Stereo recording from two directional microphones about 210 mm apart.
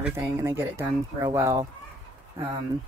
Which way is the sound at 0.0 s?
10° right (ahead or behind).